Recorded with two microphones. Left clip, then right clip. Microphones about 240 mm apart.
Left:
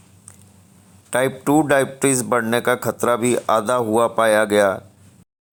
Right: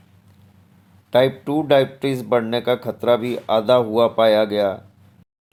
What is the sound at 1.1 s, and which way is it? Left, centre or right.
Speech, left.